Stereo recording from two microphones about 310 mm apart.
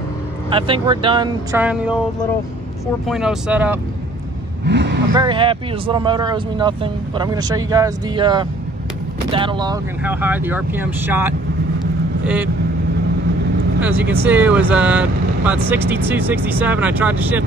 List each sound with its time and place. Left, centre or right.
0.5 s speech: centre
3.1 s speech: centre
4.6 s vehicle: right
5.1 s speech: centre
13.7 s speech: centre